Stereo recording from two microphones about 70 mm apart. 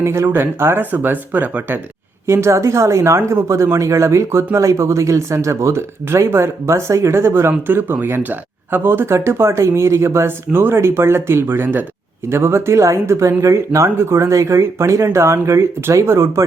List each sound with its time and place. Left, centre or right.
0.0 s speech: right
2.2 s speech: right